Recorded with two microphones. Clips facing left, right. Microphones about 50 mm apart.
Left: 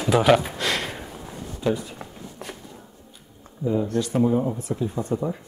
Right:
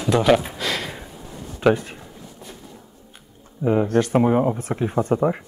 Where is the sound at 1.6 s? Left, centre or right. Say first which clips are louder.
Right 7 dB; right.